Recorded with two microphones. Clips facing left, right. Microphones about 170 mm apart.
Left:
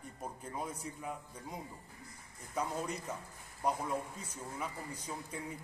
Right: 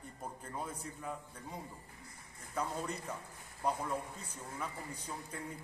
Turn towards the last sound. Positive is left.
turn(degrees=10)  # may be behind; listen again after turning